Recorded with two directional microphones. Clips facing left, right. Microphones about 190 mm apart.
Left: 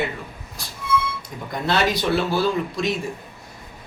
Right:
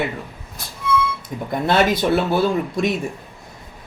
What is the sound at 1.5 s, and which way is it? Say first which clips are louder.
Speech: right 4 dB; 50° right (ahead or behind).